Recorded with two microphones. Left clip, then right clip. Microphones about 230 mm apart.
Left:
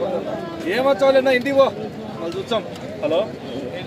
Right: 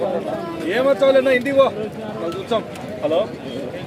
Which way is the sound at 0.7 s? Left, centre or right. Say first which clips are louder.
Right 1 dB; left.